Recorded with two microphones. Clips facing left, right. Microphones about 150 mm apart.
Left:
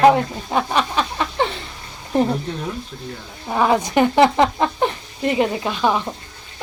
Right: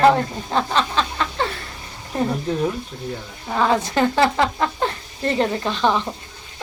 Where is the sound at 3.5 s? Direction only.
15° left (ahead or behind).